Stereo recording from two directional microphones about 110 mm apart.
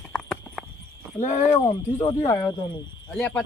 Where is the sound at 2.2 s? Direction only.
35° left (ahead or behind).